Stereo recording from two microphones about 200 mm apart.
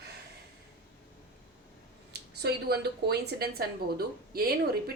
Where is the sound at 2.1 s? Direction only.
55° right (ahead or behind).